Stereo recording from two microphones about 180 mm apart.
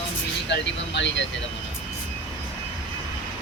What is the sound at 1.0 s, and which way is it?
Speech, 90° left.